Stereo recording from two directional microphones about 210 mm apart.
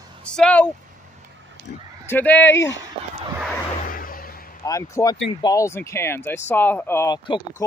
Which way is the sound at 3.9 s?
45° left (ahead or behind).